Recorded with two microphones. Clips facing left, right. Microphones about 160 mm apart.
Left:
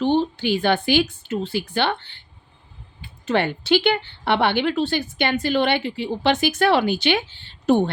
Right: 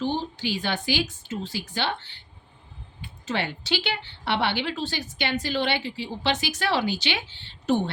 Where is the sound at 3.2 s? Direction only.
55° left (ahead or behind).